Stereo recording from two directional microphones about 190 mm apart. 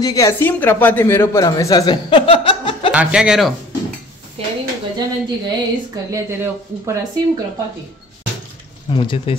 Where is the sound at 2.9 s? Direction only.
5° right (ahead or behind).